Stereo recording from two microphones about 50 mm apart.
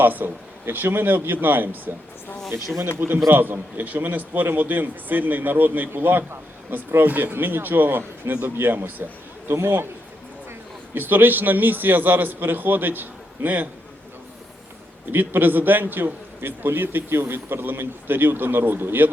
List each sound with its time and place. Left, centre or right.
0.0 s speech: right
3.2 s a man's voice: right
9.5 s a man's voice: right
10.9 s a man's voice: right
15.1 s a man's voice: right